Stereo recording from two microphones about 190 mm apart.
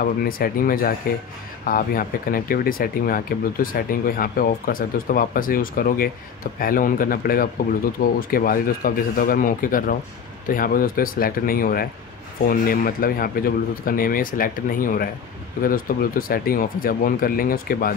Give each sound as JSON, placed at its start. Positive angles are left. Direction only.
{"t": 0.0, "sound": "speech", "side_deg": 50}